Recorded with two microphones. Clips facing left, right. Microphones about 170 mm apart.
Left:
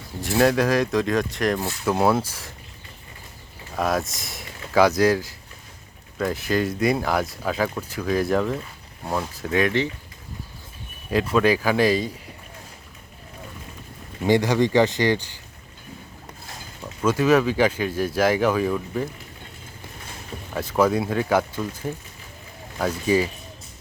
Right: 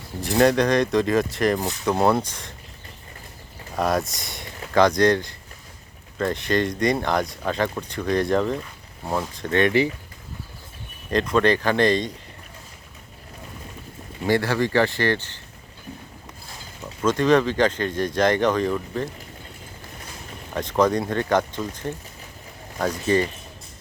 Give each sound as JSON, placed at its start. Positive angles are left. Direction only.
{"t": 0.2, "sound": "speech", "side_deg": 0}
{"t": 3.8, "sound": "speech", "side_deg": 0}
{"t": 11.1, "sound": "speech", "side_deg": 5}
{"t": 14.3, "sound": "speech", "side_deg": 15}
{"t": 17.0, "sound": "speech", "side_deg": 10}
{"t": 20.5, "sound": "speech", "side_deg": 5}